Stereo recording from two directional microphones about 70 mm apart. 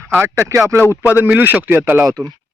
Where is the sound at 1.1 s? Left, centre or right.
Right.